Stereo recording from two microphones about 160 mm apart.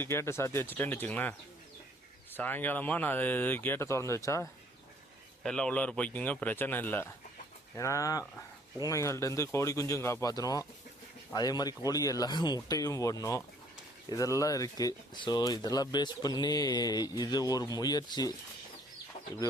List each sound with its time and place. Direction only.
0.0 s speech: 15° left (ahead or behind)
5.4 s speech: 5° left (ahead or behind); by 18.3 s 25° left (ahead or behind)